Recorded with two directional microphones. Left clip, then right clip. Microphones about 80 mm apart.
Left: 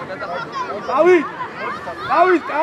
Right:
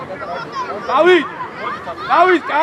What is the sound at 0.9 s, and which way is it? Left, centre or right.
Speech, right.